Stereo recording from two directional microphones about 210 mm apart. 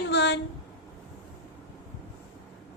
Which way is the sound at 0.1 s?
55° left (ahead or behind).